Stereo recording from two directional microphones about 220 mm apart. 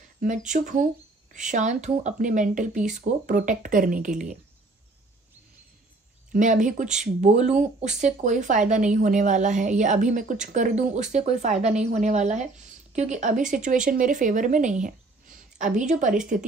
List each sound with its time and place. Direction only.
0.5 s speech: 35° right (ahead or behind)
6.3 s speech: 35° right (ahead or behind)